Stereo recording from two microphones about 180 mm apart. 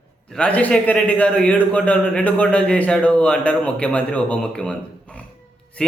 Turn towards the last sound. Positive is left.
turn(degrees=5)  # may be behind; listen again after turning